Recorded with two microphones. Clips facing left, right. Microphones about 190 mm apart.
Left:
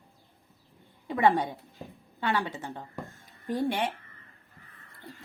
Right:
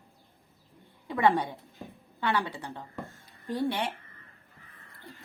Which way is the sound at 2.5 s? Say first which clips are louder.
Left 2 dB; 40° left (ahead or behind).